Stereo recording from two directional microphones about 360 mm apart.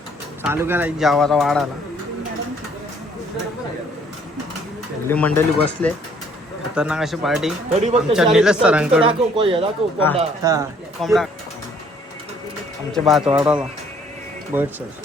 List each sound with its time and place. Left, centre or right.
0.4 s speech: centre
5.0 s speech: centre
7.7 s speech: centre
8.1 s speech: centre
9.0 s speech: centre
12.9 s speech: centre